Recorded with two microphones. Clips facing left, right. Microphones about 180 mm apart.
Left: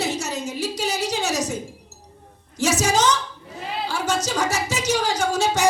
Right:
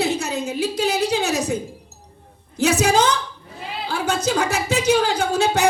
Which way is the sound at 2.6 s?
60° right (ahead or behind).